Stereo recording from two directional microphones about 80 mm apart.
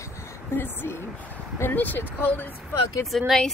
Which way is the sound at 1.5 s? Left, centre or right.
Left.